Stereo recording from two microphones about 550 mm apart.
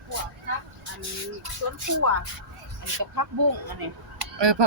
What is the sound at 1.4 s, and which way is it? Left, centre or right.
Speech, right.